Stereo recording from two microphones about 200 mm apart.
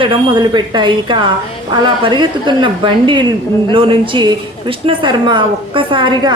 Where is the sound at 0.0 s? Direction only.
25° right (ahead or behind).